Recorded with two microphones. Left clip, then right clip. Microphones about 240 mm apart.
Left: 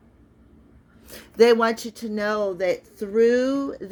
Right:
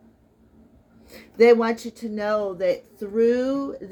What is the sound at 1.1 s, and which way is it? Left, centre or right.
Speech, left.